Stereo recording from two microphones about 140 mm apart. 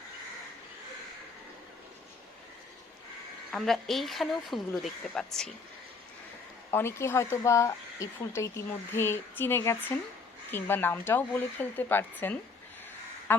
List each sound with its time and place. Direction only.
3.5 s a woman's voice: centre (ahead or behind)
6.7 s speech: 15° left (ahead or behind)